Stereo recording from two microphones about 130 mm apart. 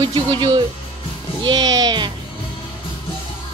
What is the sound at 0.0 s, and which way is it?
A woman's voice, 35° right (ahead or behind).